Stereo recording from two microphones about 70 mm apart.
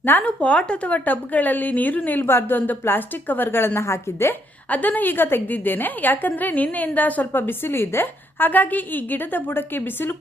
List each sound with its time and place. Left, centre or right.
0.0 s a woman's voice: left
4.7 s a woman's voice: left